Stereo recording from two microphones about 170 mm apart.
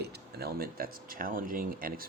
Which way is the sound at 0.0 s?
70° right (ahead or behind).